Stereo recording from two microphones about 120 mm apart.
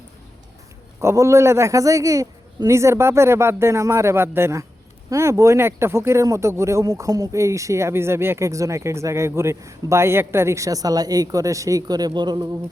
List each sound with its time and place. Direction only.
0.9 s speech: 25° right (ahead or behind)